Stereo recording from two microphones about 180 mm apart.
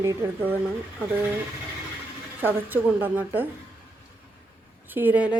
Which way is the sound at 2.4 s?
10° right (ahead or behind).